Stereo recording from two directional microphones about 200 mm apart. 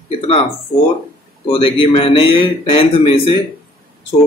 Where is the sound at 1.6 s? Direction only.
25° left (ahead or behind).